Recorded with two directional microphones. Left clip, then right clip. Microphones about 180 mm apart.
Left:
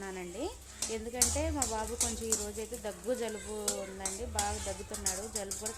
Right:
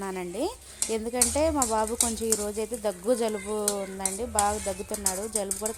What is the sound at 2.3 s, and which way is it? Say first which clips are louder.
Speech: right 8 dB; 40° right (ahead or behind).